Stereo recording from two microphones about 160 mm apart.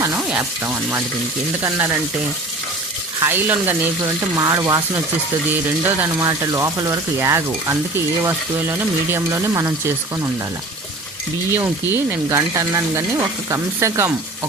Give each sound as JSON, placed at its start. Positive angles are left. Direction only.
{"t": 0.0, "sound": "speech", "side_deg": -10}
{"t": 3.2, "sound": "speech", "side_deg": -15}
{"t": 5.8, "sound": "stir", "side_deg": -20}
{"t": 9.0, "sound": "speech", "side_deg": -15}
{"t": 11.5, "sound": "stir", "side_deg": -15}